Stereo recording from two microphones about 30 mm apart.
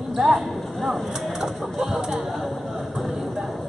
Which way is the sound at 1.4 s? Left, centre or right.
Centre.